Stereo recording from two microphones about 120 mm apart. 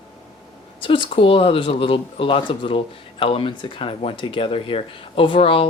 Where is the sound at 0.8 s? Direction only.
45° left (ahead or behind).